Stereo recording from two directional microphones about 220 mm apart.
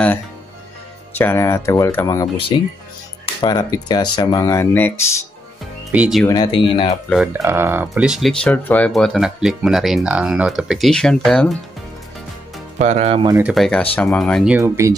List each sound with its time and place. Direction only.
1.1 s speech: 10° left (ahead or behind)
5.9 s speech: 5° right (ahead or behind)
6.2 s speech: 20° left (ahead or behind)
7.1 s speech: centre (ahead or behind)
12.7 s speech: 30° right (ahead or behind)
13.3 s speech: 5° right (ahead or behind)
14.6 s speech: 15° right (ahead or behind)